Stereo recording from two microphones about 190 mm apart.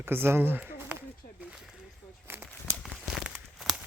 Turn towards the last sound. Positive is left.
turn(degrees=0)  # may be behind; listen again after turning